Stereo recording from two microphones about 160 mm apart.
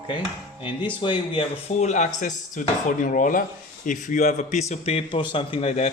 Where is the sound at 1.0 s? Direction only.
35° left (ahead or behind).